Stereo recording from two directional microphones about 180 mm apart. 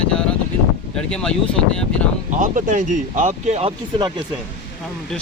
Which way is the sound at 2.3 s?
45° right (ahead or behind).